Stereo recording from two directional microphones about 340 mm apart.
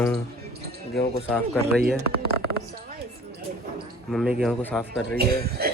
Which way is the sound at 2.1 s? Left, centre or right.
Left.